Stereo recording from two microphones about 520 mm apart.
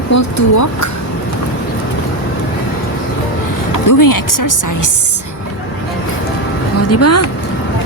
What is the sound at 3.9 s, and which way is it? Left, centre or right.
Speech, left.